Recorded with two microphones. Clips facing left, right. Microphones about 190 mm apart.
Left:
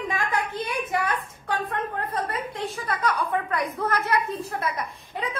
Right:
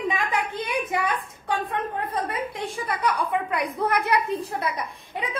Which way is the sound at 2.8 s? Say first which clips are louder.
Right 1 dB; 15° right (ahead or behind).